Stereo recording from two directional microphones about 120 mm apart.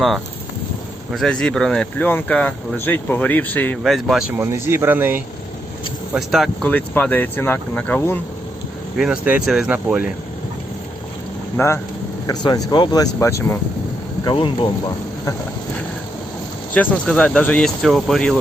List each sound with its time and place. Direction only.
1.1 s speech: 5° left (ahead or behind)
3.8 s speech: centre (ahead or behind)
4.4 s speech: 20° right (ahead or behind)
6.1 s speech: centre (ahead or behind)
6.7 s speech: 10° left (ahead or behind)
9.0 s speech: 10° right (ahead or behind)
11.5 s speech: 20° left (ahead or behind)
12.2 s speech: 35° left (ahead or behind)
14.3 s speech: 45° left (ahead or behind)
16.7 s speech: 10° left (ahead or behind)